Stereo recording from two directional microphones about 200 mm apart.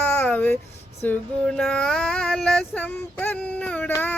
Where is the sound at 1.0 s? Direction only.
5° left (ahead or behind).